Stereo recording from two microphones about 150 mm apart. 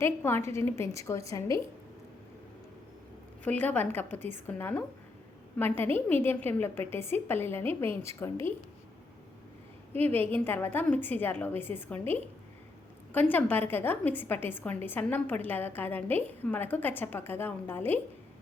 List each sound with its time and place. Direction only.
0.0 s a woman's voice: 15° left (ahead or behind)
3.4 s a woman's voice: 10° left (ahead or behind)
9.9 s a woman's voice: 15° left (ahead or behind)